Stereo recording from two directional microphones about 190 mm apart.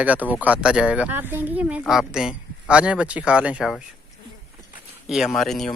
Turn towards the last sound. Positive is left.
turn(degrees=0)  # may be behind; listen again after turning